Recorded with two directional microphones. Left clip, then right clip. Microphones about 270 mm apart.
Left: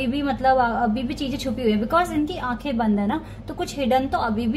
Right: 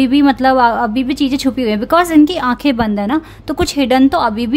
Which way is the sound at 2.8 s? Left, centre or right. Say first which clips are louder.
Right 7 dB; right.